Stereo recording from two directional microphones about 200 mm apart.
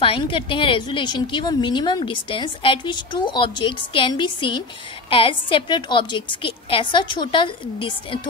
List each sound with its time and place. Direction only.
0.0 s a woman's voice: 25° left (ahead or behind)